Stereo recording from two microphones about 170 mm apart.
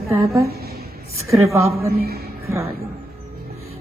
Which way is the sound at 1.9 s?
65° right (ahead or behind).